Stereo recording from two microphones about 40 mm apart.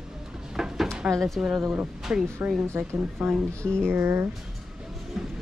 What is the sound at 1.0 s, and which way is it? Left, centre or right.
Speech, centre.